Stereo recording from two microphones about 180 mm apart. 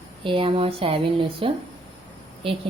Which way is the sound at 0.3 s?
30° right (ahead or behind).